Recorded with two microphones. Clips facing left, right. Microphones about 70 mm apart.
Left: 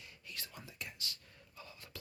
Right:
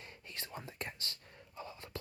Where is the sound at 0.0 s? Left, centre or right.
Right.